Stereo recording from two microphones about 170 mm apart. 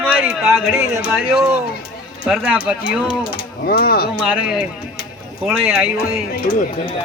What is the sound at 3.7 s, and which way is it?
Speech, 60° left (ahead or behind).